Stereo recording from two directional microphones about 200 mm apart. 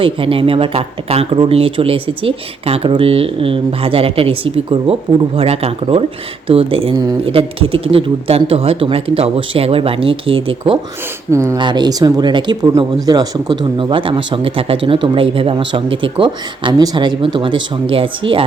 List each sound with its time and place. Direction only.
0.0 s speech: 25° right (ahead or behind)
11.3 s speech: 15° right (ahead or behind)